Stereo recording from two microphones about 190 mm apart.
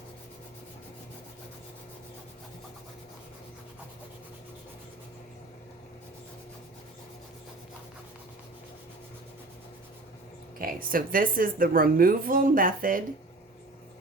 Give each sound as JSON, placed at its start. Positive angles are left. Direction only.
{"t": 10.6, "sound": "speech", "side_deg": -50}